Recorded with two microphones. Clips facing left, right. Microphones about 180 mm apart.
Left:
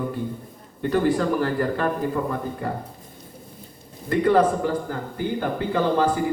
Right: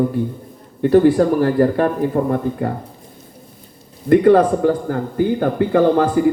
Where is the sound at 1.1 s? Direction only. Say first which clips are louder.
Right 7 dB; 40° right (ahead or behind).